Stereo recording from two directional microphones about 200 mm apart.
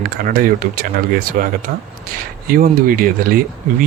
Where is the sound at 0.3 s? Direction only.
45° right (ahead or behind).